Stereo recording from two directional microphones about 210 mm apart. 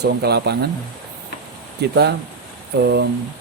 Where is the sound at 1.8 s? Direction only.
50° right (ahead or behind).